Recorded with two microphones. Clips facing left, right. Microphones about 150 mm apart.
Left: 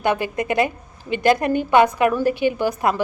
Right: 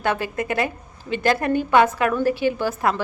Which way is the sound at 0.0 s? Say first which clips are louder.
Left 2 dB; 15° left (ahead or behind).